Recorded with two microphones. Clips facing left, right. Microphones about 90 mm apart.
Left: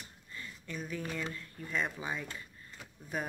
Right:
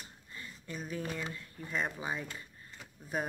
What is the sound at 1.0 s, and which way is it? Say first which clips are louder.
Speech: even; 15° right (ahead or behind).